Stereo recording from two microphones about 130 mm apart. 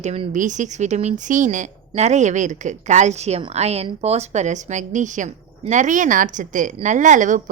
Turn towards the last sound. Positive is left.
turn(degrees=-75)  # may be behind; listen again after turning